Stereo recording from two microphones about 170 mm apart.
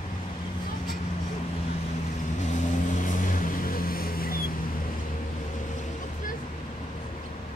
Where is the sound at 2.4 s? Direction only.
45° left (ahead or behind).